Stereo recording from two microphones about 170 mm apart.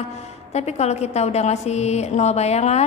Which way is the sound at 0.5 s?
40° left (ahead or behind).